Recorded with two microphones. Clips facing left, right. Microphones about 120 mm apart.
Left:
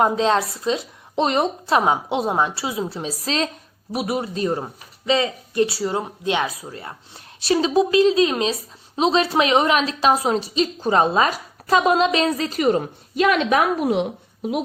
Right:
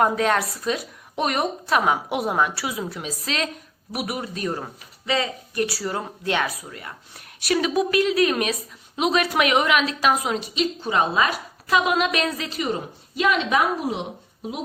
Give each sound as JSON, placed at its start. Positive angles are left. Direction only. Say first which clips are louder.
{"t": 0.0, "sound": "a woman's voice", "louder": "left 2 dB", "side_deg": 25}
{"t": 13.1, "sound": "a woman's voice", "louder": "left 3 dB", "side_deg": 50}